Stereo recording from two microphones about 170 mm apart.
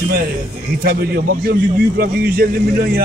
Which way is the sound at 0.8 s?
65° right (ahead or behind).